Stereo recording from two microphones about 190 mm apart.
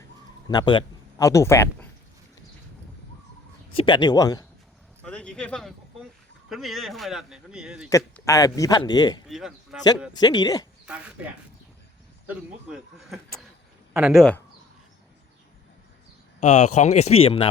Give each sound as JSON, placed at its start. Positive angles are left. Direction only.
{"t": 0.4, "sound": "speech", "side_deg": 25}
{"t": 3.8, "sound": "a man's voice", "side_deg": 25}
{"t": 5.0, "sound": "speech", "side_deg": 5}
{"t": 7.9, "sound": "a man's voice", "side_deg": 15}
{"t": 10.8, "sound": "speech", "side_deg": -5}
{"t": 12.3, "sound": "speech", "side_deg": -5}
{"t": 16.4, "sound": "speech", "side_deg": 40}